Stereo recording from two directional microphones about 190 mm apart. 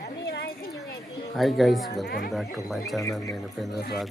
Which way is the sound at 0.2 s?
60° left (ahead or behind).